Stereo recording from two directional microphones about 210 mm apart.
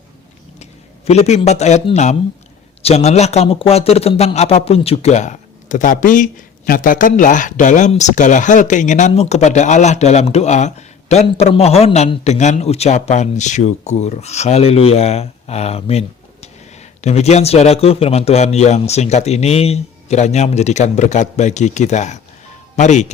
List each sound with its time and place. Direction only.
0.6 s a man's voice: 30° left (ahead or behind)